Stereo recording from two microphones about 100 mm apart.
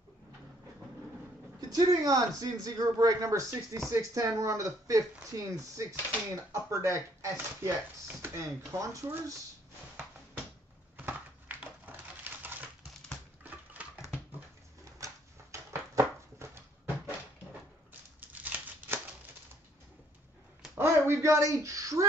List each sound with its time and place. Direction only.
1.7 s speech: 35° right (ahead or behind)
11.0 s crushing: 15° right (ahead or behind)
13.4 s typewriter: 15° right (ahead or behind)
15.5 s a sound: 30° right (ahead or behind)
18.2 s crumpling: 15° right (ahead or behind)
20.7 s a sound: 30° right (ahead or behind)